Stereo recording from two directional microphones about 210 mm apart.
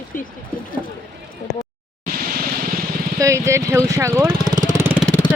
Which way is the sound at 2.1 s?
45° right (ahead or behind).